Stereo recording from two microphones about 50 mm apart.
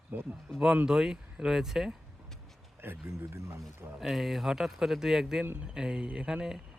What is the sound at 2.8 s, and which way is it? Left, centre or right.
Speech, right.